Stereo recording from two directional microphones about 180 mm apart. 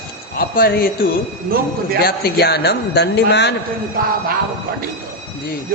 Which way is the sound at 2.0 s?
60° left (ahead or behind).